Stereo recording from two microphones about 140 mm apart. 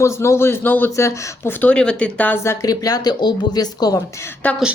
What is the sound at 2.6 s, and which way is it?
A woman's voice, 25° left (ahead or behind).